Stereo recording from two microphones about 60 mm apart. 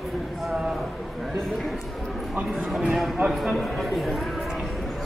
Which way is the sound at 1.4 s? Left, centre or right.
Centre.